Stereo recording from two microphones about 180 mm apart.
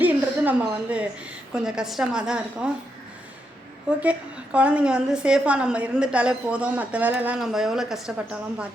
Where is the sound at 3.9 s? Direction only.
5° right (ahead or behind).